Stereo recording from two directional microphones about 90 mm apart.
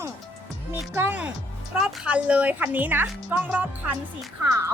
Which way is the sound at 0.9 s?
20° right (ahead or behind).